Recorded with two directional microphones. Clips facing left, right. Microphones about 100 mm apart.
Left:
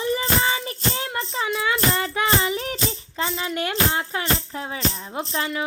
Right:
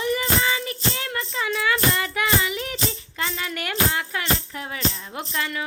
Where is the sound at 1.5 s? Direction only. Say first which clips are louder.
Even; 20° left (ahead or behind).